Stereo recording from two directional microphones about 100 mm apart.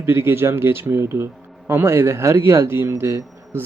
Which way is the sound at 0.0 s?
25° right (ahead or behind).